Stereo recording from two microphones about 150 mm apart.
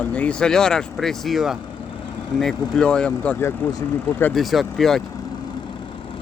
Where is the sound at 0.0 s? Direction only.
10° left (ahead or behind).